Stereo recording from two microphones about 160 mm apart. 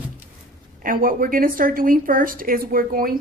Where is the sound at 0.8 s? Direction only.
60° right (ahead or behind).